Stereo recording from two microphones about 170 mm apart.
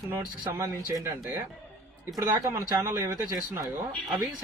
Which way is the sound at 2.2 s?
20° right (ahead or behind).